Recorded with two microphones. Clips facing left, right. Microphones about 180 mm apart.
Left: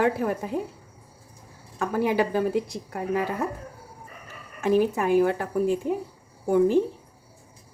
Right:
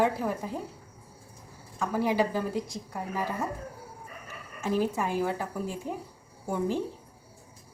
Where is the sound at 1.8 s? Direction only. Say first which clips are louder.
Left 3 dB; 60° left (ahead or behind).